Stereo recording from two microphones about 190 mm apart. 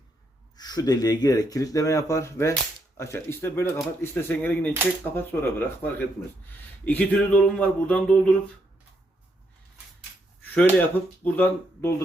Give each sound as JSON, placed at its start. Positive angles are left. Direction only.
{"t": 0.5, "sound": "speech", "side_deg": 20}
{"t": 6.8, "sound": "a sound", "side_deg": 10}
{"t": 10.5, "sound": "speech", "side_deg": 10}